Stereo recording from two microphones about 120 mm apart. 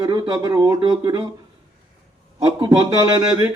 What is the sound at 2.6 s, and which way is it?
Speech, 35° right (ahead or behind).